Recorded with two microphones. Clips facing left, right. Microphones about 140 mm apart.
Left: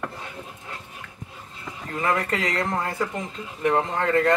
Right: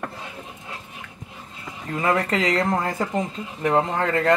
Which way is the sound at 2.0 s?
30° right (ahead or behind).